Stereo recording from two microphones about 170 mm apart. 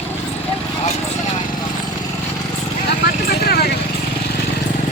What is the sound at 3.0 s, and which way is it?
Vehicle, 65° left (ahead or behind).